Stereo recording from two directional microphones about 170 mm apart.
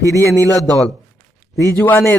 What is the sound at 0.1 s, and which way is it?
A man's voice, 15° left (ahead or behind).